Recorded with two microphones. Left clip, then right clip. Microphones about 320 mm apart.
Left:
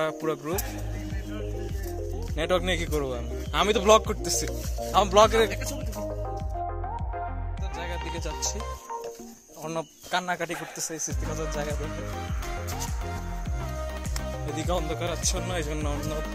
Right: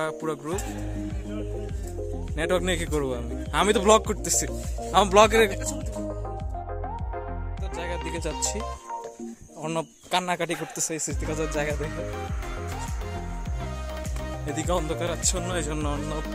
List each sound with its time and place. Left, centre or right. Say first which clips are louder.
0.0 s speech: left 1 dB; centre
2.3 s a man's voice: even; centre
7.7 s music: right 3 dB; right
9.6 s a man's voice: right 3 dB; right
14.5 s speech: right 3 dB; centre